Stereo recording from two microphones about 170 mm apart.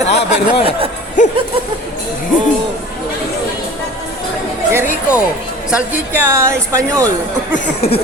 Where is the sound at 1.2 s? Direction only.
45° left (ahead or behind).